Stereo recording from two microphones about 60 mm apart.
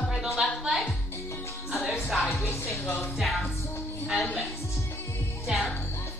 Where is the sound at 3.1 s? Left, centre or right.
Centre.